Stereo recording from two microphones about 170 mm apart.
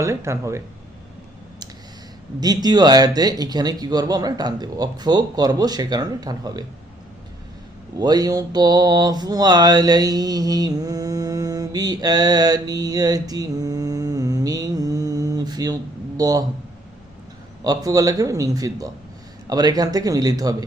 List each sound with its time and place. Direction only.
0.0 s speech: 15° right (ahead or behind)
2.4 s speech: 25° right (ahead or behind)
7.9 s mantra: 20° right (ahead or behind)
17.6 s speech: 20° right (ahead or behind)